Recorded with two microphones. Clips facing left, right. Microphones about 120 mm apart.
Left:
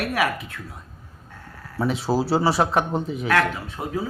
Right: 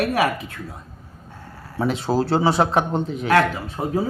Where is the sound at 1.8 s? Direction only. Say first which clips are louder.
Right 1 dB; centre (ahead or behind).